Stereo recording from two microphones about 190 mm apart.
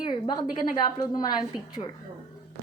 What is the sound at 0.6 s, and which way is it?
Speech, 20° left (ahead or behind).